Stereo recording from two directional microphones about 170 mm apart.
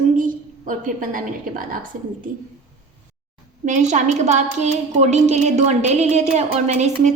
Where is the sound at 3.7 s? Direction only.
45° right (ahead or behind).